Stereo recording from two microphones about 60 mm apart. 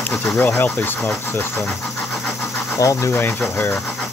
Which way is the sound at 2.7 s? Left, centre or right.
Left.